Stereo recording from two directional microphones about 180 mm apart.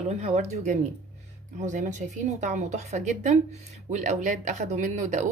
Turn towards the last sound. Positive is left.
turn(degrees=-40)  # may be behind; listen again after turning